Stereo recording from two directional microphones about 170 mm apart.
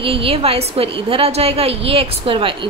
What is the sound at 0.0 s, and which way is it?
A woman's voice, 35° right (ahead or behind).